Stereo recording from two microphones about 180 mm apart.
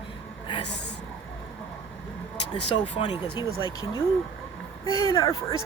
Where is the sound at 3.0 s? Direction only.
25° left (ahead or behind).